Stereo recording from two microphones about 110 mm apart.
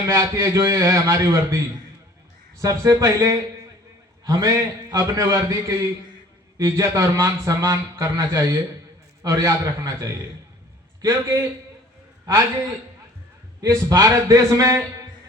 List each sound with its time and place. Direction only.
0.1 s a man's voice: 30° right (ahead or behind)
2.6 s a man's voice: 30° right (ahead or behind)
4.3 s a man's voice: 35° right (ahead or behind)
13.6 s a man's voice: 35° right (ahead or behind)